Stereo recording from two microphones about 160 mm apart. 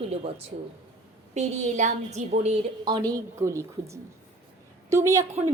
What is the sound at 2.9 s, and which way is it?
A woman's voice, 25° right (ahead or behind).